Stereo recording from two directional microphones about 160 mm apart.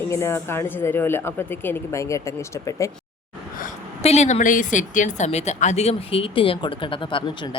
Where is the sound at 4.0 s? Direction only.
40° left (ahead or behind).